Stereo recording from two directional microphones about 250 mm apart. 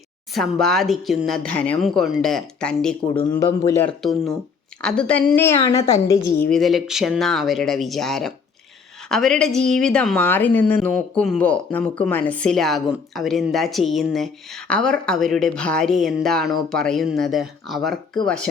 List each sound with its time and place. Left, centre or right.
0.3 s a woman's voice: centre
3.1 s a woman's voice: centre
6.5 s a woman's voice: centre